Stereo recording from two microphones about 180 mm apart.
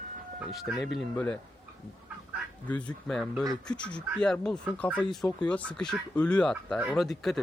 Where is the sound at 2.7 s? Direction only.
5° left (ahead or behind).